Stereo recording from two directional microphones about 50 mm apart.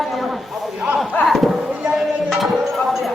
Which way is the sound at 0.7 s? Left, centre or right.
Right.